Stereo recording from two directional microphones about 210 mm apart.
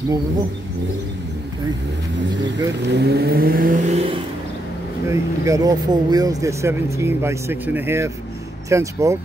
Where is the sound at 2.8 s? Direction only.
55° right (ahead or behind); by 4.2 s 35° right (ahead or behind).